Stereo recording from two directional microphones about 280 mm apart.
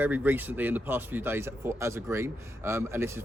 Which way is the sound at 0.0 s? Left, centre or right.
Centre.